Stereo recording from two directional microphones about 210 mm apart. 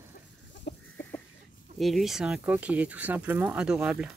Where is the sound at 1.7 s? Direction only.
Centre (ahead or behind).